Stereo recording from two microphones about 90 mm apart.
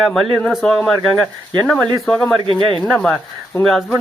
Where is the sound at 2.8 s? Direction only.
10° left (ahead or behind).